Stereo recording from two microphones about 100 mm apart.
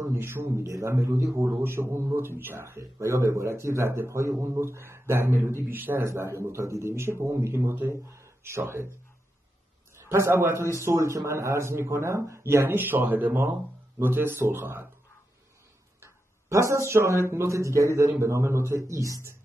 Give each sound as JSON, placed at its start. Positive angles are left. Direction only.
{"t": 0.0, "sound": "speech", "side_deg": -25}
{"t": 10.0, "sound": "speech", "side_deg": -25}
{"t": 16.0, "sound": "speech", "side_deg": -30}